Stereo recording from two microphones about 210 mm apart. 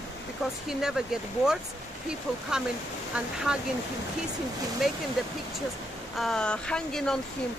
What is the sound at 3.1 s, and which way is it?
Speech, 5° right (ahead or behind).